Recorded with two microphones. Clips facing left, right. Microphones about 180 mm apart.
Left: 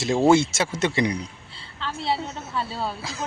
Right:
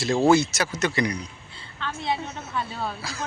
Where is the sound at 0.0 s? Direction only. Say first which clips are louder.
Left 1 dB; 25° left (ahead or behind).